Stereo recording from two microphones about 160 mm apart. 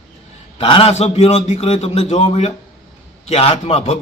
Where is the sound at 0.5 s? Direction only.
35° left (ahead or behind).